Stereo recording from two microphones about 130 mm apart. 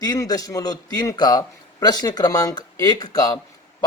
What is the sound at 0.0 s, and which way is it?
A man's voice, 30° left (ahead or behind).